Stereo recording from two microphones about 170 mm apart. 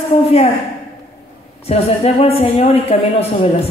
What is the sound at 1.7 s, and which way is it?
A woman's voice, 35° left (ahead or behind).